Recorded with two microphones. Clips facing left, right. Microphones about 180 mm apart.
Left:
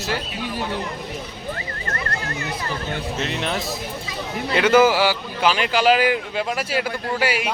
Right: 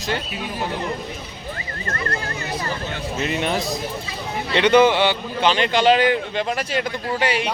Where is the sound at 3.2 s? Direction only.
Centre (ahead or behind).